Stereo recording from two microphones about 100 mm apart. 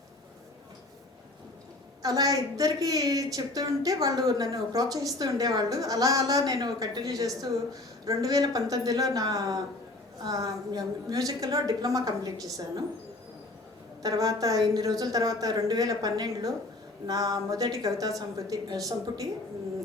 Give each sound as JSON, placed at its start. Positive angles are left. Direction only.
{"t": 2.0, "sound": "a woman's voice", "side_deg": -40}
{"t": 14.0, "sound": "a woman's voice", "side_deg": -35}